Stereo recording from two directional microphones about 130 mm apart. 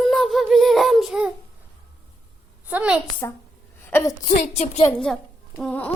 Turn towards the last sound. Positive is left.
turn(degrees=10)  # may be behind; listen again after turning